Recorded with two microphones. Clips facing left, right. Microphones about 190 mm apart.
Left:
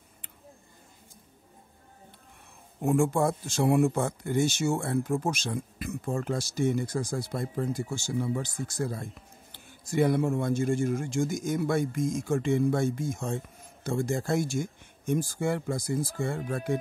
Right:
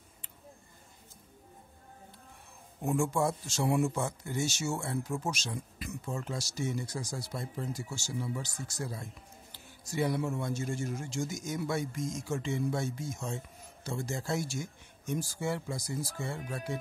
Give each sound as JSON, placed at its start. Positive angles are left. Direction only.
{"t": 2.8, "sound": "speech", "side_deg": 55}